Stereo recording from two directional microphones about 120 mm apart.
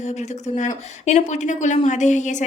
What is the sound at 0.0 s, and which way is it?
A woman's voice, 75° left (ahead or behind).